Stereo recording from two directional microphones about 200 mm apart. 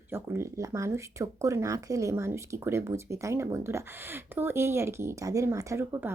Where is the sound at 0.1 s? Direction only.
10° right (ahead or behind).